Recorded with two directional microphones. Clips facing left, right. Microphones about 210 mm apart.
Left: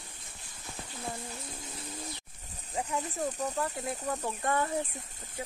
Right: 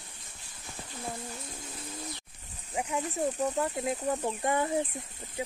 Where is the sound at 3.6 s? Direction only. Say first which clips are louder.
Right 4 dB; 20° right (ahead or behind).